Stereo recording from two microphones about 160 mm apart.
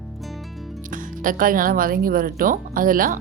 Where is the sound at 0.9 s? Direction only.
60° right (ahead or behind).